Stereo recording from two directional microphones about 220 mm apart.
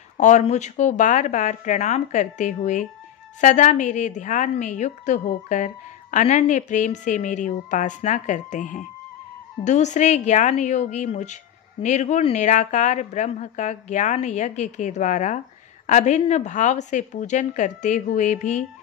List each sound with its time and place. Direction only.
0.2 s a woman's voice: 30° left (ahead or behind)